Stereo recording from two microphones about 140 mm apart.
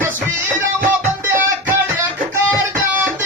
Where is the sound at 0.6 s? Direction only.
15° right (ahead or behind).